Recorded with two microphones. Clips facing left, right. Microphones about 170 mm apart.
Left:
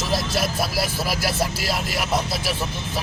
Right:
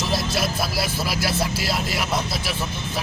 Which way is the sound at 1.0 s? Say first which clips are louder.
Even; 40° left (ahead or behind).